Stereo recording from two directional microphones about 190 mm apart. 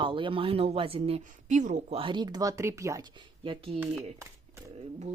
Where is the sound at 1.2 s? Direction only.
40° right (ahead or behind).